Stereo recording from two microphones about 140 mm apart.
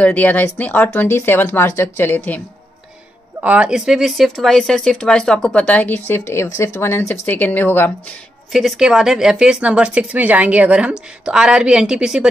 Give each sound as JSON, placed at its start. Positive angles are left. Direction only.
{"t": 0.0, "sound": "a woman's voice", "side_deg": 10}
{"t": 3.3, "sound": "a woman's voice", "side_deg": -10}
{"t": 8.5, "sound": "speech", "side_deg": 0}